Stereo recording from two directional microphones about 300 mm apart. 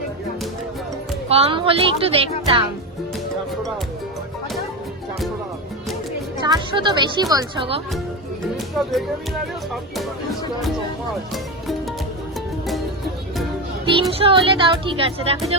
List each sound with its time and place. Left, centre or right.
1.3 s speech: centre
6.4 s a woman's voice: centre
8.7 s speech: centre
14.1 s a woman's voice: centre